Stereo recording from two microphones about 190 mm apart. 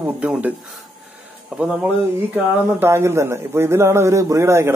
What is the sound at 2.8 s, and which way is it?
Speech, 15° right (ahead or behind).